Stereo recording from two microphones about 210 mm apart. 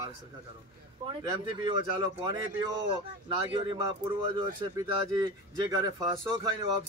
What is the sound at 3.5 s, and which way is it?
Speech, 20° right (ahead or behind).